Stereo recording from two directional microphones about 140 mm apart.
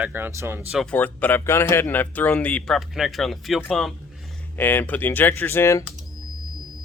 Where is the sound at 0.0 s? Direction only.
15° right (ahead or behind).